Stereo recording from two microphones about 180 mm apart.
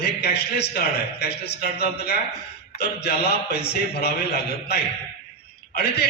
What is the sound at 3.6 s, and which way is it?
Speech, 65° left (ahead or behind).